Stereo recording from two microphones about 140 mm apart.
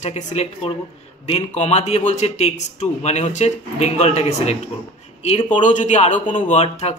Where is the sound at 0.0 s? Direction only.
55° left (ahead or behind).